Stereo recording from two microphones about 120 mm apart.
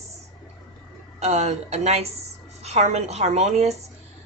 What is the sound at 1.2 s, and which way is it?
A woman's voice, 65° right (ahead or behind).